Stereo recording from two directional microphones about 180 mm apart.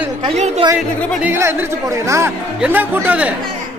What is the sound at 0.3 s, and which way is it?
Speech, 40° right (ahead or behind).